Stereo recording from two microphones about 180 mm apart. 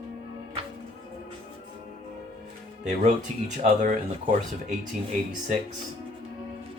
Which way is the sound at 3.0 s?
45° right (ahead or behind).